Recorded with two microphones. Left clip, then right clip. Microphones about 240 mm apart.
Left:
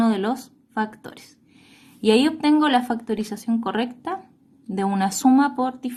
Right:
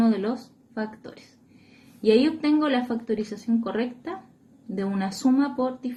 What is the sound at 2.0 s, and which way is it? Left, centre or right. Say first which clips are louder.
Speech: left 2 dB; left.